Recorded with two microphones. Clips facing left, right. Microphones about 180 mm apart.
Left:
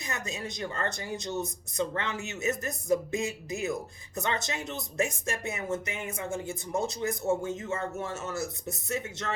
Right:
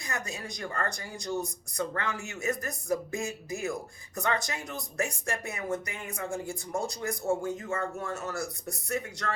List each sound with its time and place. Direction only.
0.0 s speech: 20° left (ahead or behind)